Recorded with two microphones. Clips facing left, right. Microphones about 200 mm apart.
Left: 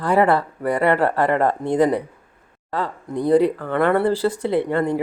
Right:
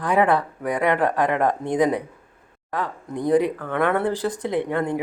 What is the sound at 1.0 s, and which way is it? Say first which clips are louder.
Speech: left 2 dB; 15° right (ahead or behind).